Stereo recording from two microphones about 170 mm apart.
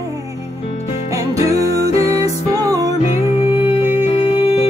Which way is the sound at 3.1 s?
40° left (ahead or behind).